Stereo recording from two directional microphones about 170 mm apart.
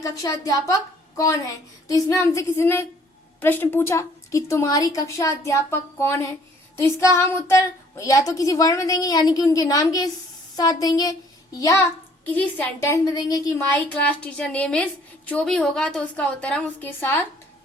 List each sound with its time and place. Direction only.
0.0 s a woman's voice: 20° left (ahead or behind)
12.2 s a woman's voice: 10° left (ahead or behind)
13.9 s a woman's voice: 5° left (ahead or behind)